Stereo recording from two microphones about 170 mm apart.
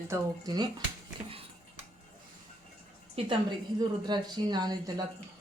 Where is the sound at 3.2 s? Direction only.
35° right (ahead or behind).